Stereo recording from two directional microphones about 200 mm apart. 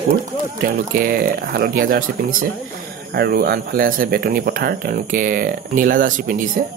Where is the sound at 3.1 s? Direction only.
50° right (ahead or behind).